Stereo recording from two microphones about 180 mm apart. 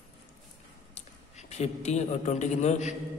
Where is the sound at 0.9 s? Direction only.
40° left (ahead or behind).